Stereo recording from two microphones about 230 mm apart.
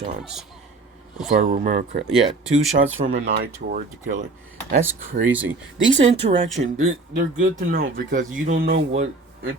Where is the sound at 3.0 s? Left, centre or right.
Right.